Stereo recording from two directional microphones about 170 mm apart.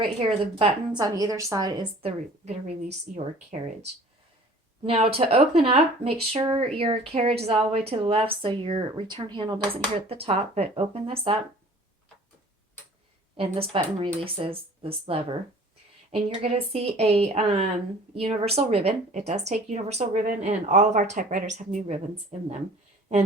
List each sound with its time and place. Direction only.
0.0 s a woman's voice: 30° right (ahead or behind)
4.8 s speech: 35° right (ahead or behind)
13.3 s speech: 35° right (ahead or behind)